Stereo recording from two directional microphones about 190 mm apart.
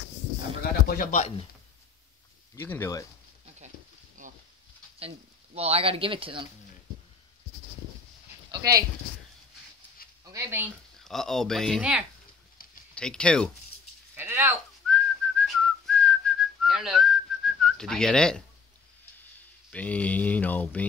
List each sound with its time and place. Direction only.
0.8 s speech: 45° left (ahead or behind)
2.5 s speech: 10° left (ahead or behind)
4.9 s speech: 30° right (ahead or behind)
8.5 s dog: 20° right (ahead or behind)
10.0 s a sound: 50° left (ahead or behind)
10.3 s speech: 10° right (ahead or behind)
11.1 s speech: centre (ahead or behind)
14.1 s a sound: 10° right (ahead or behind)
14.9 s whistling: 5° left (ahead or behind)
19.7 s speech: 5° left (ahead or behind)